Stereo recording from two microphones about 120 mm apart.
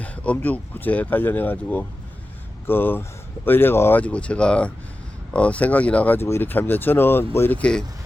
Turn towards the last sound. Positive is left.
turn(degrees=10)  # may be behind; listen again after turning